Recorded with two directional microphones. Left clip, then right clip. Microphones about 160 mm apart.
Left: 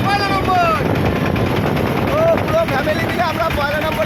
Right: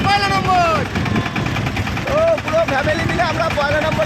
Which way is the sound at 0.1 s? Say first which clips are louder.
Right 1 dB; 30° right (ahead or behind).